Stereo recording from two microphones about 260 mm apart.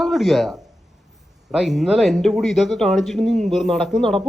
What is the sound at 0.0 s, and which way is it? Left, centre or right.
Speech, centre.